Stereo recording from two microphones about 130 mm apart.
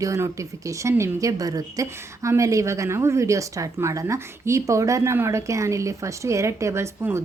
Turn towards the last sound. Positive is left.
turn(degrees=-20)  # may be behind; listen again after turning